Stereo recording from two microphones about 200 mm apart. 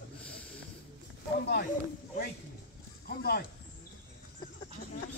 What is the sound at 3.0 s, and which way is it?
Speech, 50° left (ahead or behind).